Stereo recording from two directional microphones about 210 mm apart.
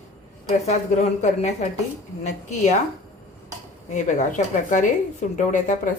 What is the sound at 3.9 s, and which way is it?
Speech, 35° left (ahead or behind).